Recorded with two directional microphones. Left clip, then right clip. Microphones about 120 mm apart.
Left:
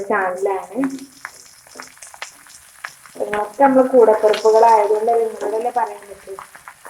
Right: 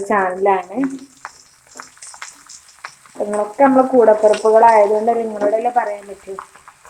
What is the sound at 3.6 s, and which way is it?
Speech, 40° right (ahead or behind).